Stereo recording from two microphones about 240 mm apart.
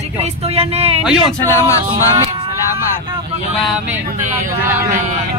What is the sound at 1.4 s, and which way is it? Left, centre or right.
Speech, centre.